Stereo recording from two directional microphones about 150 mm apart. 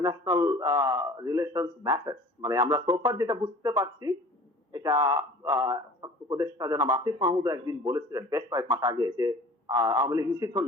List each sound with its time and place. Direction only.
0.0 s speech: 20° right (ahead or behind)